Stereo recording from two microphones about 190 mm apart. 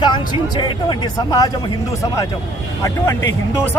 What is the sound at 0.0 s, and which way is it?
Speech, 25° left (ahead or behind).